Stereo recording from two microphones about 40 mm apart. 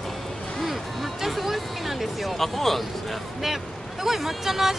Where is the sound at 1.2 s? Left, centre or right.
Centre.